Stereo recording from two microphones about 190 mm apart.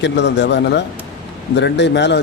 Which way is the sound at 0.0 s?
65° left (ahead or behind).